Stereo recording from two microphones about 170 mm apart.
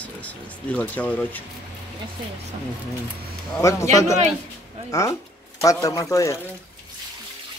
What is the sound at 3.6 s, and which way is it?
A man's voice, 20° left (ahead or behind).